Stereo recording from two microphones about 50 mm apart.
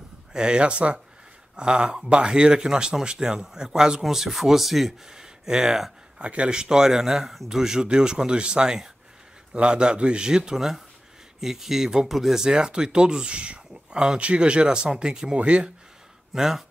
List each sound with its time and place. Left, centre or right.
0.3 s a man's voice: centre
6.1 s a man's voice: right; by 12.4 s centre
12.4 s a man's voice: centre
16.3 s speech: centre